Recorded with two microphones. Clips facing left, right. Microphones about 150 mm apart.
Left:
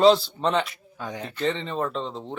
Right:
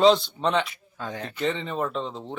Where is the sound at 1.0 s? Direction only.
15° left (ahead or behind).